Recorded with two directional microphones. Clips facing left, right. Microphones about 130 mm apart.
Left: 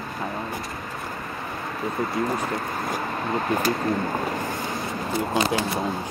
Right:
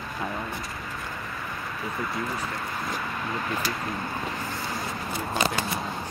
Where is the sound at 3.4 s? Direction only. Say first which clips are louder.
Left 9 dB; 45° left (ahead or behind).